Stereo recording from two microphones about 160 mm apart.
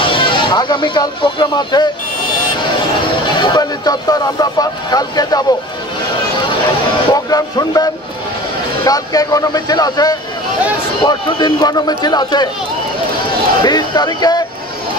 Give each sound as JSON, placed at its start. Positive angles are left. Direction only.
{"t": 0.0, "sound": "speech", "side_deg": 30}
{"t": 3.3, "sound": "speech", "side_deg": 25}
{"t": 7.1, "sound": "speech", "side_deg": 25}
{"t": 13.6, "sound": "speech", "side_deg": 25}